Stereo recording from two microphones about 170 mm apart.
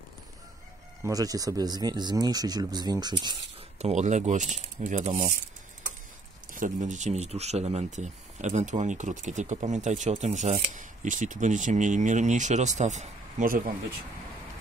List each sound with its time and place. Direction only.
1.0 s speech: 20° right (ahead or behind)
3.7 s speech: 40° right (ahead or behind)
6.5 s speech: 50° right (ahead or behind)